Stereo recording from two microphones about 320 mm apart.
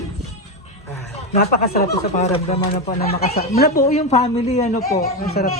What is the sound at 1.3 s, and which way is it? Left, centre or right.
Speech, left.